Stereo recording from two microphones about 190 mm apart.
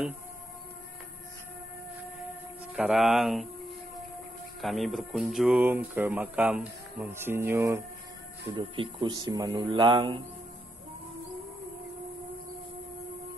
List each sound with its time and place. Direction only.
2.7 s speech: centre (ahead or behind)
4.6 s speech: centre (ahead or behind)
8.5 s speech: 25° right (ahead or behind)